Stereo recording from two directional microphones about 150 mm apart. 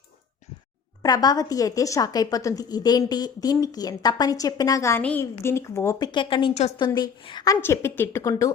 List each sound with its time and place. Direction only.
1.0 s a woman's voice: 25° left (ahead or behind)
6.5 s a woman's voice: 45° left (ahead or behind)
6.7 s a woman's voice: 30° left (ahead or behind)